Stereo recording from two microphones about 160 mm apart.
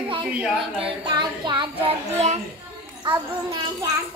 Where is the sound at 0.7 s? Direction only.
35° right (ahead or behind).